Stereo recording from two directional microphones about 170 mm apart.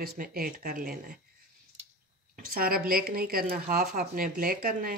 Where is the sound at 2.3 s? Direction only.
60° right (ahead or behind).